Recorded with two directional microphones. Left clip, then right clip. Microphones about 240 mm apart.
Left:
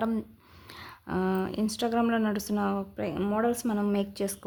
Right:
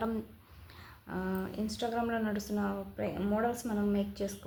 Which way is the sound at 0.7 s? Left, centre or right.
Left.